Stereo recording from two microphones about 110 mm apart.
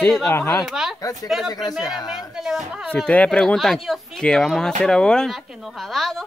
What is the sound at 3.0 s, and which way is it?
Speech, 10° left (ahead or behind).